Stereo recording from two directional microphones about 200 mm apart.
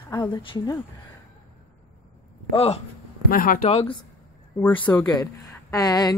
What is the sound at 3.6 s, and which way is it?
Speech, 30° left (ahead or behind).